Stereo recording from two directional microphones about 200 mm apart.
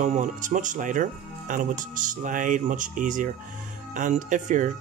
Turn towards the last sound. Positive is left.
turn(degrees=-40)  # may be behind; listen again after turning